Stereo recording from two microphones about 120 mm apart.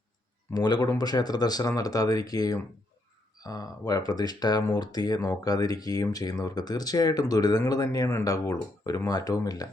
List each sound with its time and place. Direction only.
0.5 s speech: 35° left (ahead or behind)